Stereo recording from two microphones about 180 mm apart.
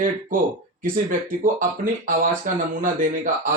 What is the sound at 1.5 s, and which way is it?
Speech, 50° right (ahead or behind).